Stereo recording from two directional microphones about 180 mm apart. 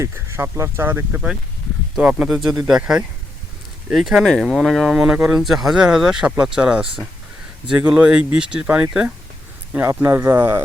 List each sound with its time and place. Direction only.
0.0 s speech: 15° right (ahead or behind)